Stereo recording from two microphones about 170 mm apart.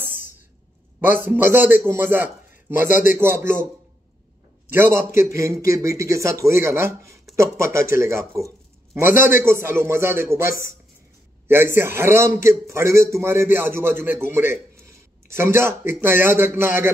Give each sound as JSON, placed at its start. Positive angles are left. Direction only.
{"t": 1.0, "sound": "a man's voice", "side_deg": -10}
{"t": 2.9, "sound": "speech", "side_deg": 50}
{"t": 3.2, "sound": "a man's voice", "side_deg": -15}
{"t": 4.6, "sound": "a man's voice", "side_deg": -15}